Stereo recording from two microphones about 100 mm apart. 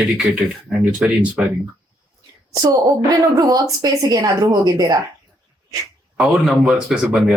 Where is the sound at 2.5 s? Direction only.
40° right (ahead or behind).